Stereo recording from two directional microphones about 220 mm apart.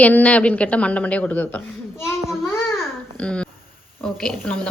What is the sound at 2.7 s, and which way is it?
Babbling, 10° left (ahead or behind).